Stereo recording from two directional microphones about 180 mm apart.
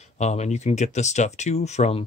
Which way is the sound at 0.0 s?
40° left (ahead or behind).